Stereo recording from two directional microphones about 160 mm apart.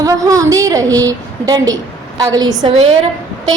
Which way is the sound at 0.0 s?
20° right (ahead or behind).